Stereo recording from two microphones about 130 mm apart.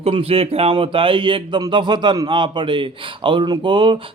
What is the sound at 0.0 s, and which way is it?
A man's voice, 45° right (ahead or behind).